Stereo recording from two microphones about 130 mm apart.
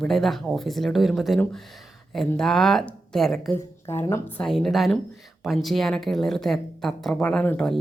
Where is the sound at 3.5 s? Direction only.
15° left (ahead or behind).